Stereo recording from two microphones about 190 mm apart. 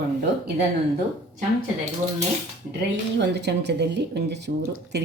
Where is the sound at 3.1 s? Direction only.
65° right (ahead or behind).